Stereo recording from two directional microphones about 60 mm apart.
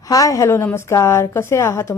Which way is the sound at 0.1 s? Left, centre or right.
Left.